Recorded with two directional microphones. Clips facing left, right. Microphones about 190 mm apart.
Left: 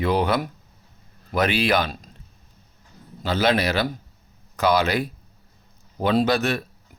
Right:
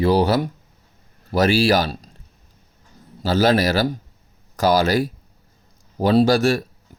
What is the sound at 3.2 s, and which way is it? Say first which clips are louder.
Speech: right 4 dB; 40° right (ahead or behind).